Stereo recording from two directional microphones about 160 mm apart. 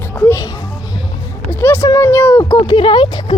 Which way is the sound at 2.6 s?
30° left (ahead or behind).